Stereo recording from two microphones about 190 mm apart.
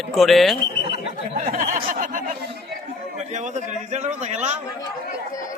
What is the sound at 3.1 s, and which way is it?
A man's voice, 40° right (ahead or behind).